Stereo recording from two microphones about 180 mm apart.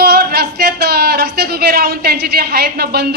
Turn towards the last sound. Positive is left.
turn(degrees=-60)  # may be behind; listen again after turning